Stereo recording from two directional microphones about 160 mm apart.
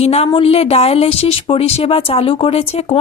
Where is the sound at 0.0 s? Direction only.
40° left (ahead or behind).